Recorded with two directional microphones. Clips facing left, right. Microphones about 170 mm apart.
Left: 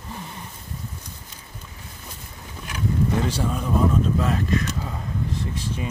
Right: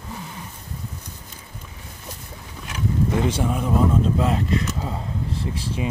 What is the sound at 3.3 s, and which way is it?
Speech, 20° right (ahead or behind).